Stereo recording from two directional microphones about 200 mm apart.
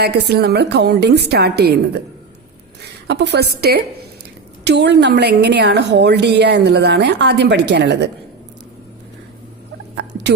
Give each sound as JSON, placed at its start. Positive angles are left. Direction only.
{"t": 0.0, "sound": "a woman's voice", "side_deg": -55}
{"t": 3.1, "sound": "a woman's voice", "side_deg": -60}
{"t": 9.9, "sound": "rodents", "side_deg": -60}